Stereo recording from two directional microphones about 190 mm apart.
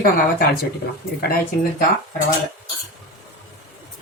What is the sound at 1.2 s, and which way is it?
Speech, 50° left (ahead or behind).